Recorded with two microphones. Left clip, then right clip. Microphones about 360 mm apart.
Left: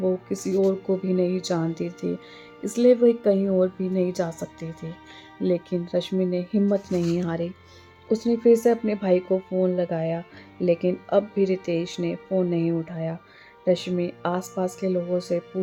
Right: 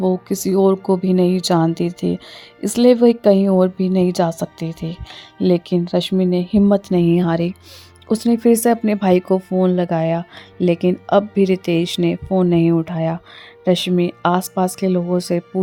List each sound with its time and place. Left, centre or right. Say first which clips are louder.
0.0 s speech: right 6 dB; right